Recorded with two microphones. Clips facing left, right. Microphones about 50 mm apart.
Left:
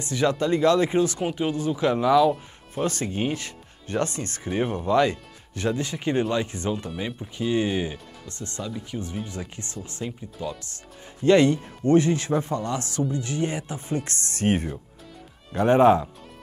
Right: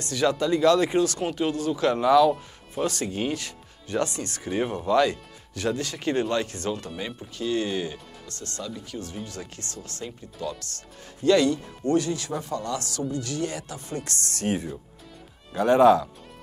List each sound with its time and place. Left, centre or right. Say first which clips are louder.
0.0 s speech: left 1 dB; left
2.8 s speech: left 1 dB; left
4.5 s speech: left 1 dB; centre
4.9 s speech: even; left
11.2 s speech: left 2 dB; left
14.5 s speech: left 3 dB; left